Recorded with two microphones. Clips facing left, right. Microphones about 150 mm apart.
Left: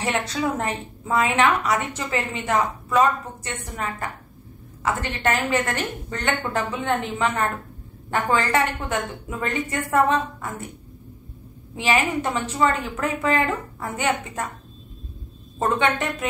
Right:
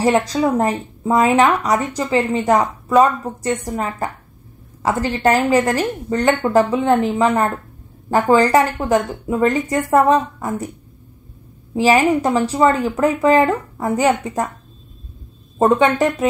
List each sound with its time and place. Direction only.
0.0 s a woman's voice: 35° right (ahead or behind)
11.7 s a woman's voice: 35° right (ahead or behind)
15.6 s a woman's voice: 35° right (ahead or behind)